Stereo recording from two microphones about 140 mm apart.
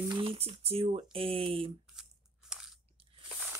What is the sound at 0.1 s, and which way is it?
Speech, 40° right (ahead or behind).